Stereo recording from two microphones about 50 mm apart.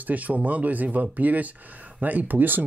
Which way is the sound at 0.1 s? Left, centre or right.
Right.